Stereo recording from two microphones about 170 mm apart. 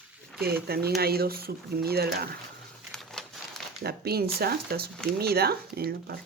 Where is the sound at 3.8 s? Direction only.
65° right (ahead or behind).